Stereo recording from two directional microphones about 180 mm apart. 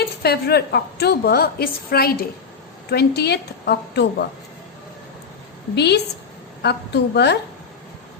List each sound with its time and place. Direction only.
0.2 s a woman's voice: 60° left (ahead or behind)
5.7 s a woman's voice: 65° left (ahead or behind)